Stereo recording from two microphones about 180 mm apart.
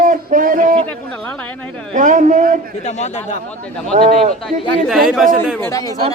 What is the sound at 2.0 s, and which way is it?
Speech, 45° right (ahead or behind).